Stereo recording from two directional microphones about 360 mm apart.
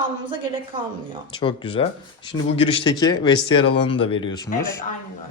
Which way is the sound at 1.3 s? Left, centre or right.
Centre.